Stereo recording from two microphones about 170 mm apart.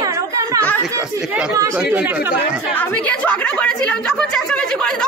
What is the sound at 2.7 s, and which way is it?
A woman's voice, 10° left (ahead or behind).